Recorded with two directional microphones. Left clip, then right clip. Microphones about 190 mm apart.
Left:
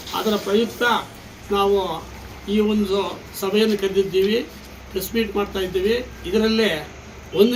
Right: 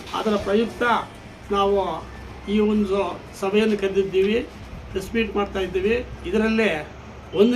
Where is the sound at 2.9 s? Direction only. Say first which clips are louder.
Left 1 dB; 5° left (ahead or behind).